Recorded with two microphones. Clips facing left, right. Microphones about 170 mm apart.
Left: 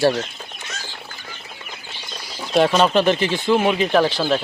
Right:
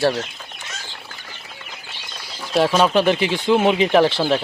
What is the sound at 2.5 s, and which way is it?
Speech, centre (ahead or behind).